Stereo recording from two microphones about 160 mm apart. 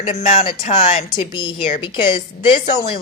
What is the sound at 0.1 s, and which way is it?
Speech, 45° left (ahead or behind).